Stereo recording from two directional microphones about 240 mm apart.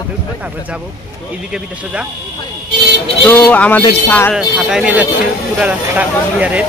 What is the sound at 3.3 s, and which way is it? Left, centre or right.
A man's voice, centre.